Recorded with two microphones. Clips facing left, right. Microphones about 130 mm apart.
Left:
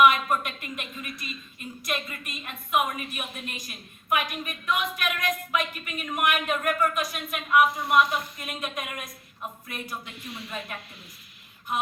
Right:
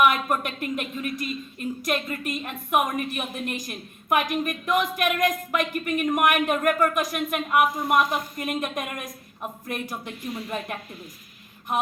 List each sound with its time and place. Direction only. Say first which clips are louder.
0.1 s a woman's voice: right 1 dB; 50° right (ahead or behind)